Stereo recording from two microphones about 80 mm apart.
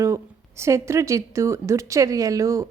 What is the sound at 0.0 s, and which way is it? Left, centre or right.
A woman's voice, right.